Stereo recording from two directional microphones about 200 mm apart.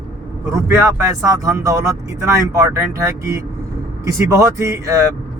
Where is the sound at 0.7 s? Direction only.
15° right (ahead or behind).